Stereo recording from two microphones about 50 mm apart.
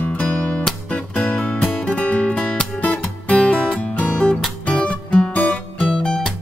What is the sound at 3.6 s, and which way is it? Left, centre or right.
Music, centre.